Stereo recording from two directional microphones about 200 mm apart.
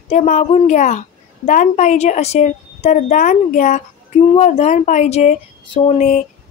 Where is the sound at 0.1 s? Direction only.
35° left (ahead or behind).